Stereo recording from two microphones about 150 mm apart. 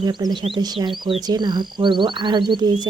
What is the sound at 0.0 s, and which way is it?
Speech, 30° right (ahead or behind).